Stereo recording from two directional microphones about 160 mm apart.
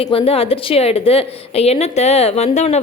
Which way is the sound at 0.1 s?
35° left (ahead or behind).